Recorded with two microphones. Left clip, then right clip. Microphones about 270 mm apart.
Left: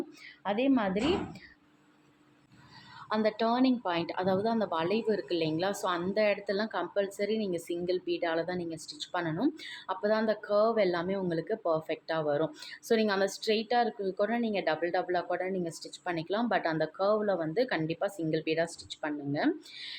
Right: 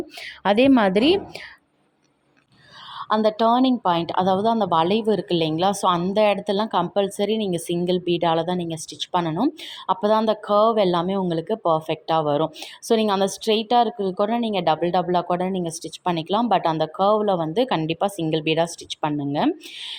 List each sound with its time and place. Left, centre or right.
0.2 s a woman's voice: right
3.0 s a woman's voice: right